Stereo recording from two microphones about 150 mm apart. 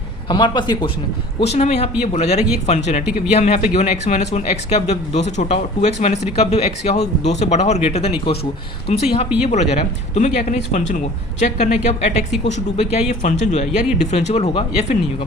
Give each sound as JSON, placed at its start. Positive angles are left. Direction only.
{"t": 0.3, "sound": "speech", "side_deg": 30}
{"t": 1.4, "sound": "speech", "side_deg": 45}